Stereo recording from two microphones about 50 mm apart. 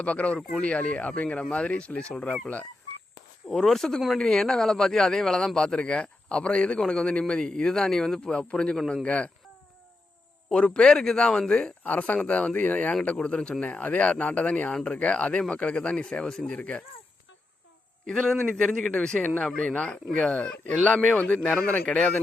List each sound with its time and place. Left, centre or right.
0.0 s speech: left
3.5 s a man's voice: centre; by 9.3 s left
10.5 s a man's voice: centre
11.8 s speech: left
13.1 s speech: centre
14.7 s a man's voice: centre
14.9 s speech: left
18.1 s a man's voice: centre
19.5 s speech: left
21.9 s speech: left